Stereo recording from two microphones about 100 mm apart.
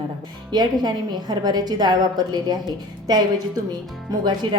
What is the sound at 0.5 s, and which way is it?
A woman's voice, 45° right (ahead or behind).